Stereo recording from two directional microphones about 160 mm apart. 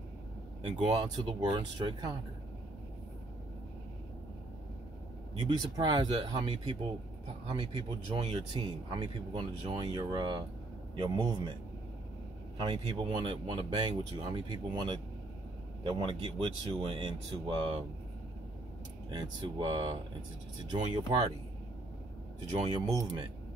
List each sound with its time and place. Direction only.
0.6 s speech: 30° right (ahead or behind)
5.6 s speech: 25° right (ahead or behind)
12.5 s speech: 30° right (ahead or behind)
19.0 s speech: 25° right (ahead or behind)
22.5 s speech: 35° right (ahead or behind)